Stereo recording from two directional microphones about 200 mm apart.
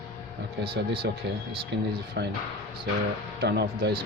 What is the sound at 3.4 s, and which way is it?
Speech, 55° right (ahead or behind).